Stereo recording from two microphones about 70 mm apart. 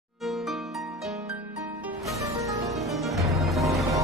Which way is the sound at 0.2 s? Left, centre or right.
Centre.